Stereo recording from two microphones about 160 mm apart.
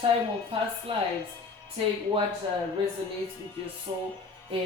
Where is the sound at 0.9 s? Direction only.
30° right (ahead or behind).